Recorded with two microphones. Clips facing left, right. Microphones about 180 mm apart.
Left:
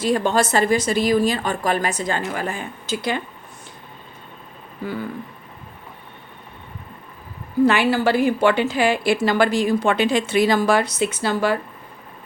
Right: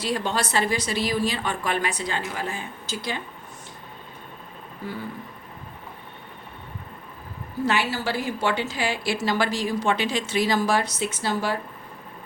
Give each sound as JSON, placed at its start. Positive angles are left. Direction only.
{"t": 0.0, "sound": "a woman's voice", "side_deg": 50}
{"t": 7.6, "sound": "a woman's voice", "side_deg": 55}